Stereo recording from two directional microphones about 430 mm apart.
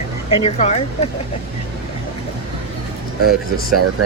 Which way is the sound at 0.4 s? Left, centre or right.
Centre.